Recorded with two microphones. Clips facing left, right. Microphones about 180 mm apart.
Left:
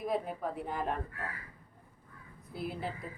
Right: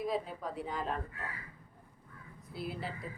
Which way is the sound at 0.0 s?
55° left (ahead or behind).